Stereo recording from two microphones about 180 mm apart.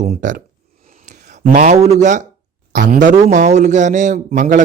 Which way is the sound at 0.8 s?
45° right (ahead or behind).